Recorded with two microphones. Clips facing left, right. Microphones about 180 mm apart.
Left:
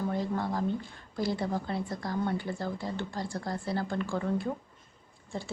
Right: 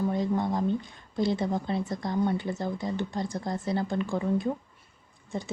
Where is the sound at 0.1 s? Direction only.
20° right (ahead or behind).